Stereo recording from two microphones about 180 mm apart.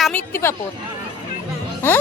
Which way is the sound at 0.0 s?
10° left (ahead or behind).